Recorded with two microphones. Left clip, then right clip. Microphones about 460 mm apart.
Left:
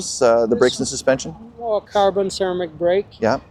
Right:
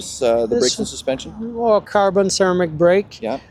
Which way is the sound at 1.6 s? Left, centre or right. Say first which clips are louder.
Right 2 dB; right.